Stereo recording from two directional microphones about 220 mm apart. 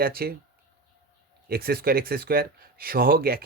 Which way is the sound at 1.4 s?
45° right (ahead or behind).